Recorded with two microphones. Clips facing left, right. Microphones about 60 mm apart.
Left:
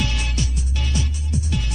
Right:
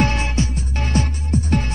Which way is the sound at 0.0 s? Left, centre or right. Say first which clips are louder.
Right 7 dB; right.